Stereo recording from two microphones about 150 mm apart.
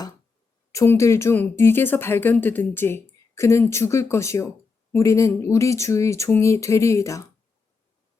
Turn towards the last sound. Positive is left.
turn(degrees=20)  # may be behind; listen again after turning